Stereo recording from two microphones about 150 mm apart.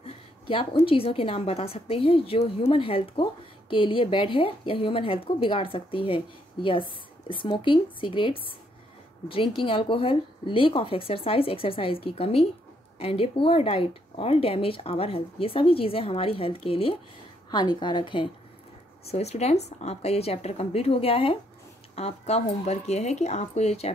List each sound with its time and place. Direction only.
0.0 s a woman's voice: 40° left (ahead or behind)
19.0 s a woman's voice: 45° left (ahead or behind)